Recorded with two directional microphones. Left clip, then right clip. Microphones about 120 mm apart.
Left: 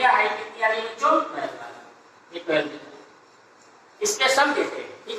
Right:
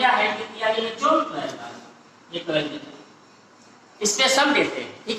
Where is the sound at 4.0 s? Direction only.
30° right (ahead or behind).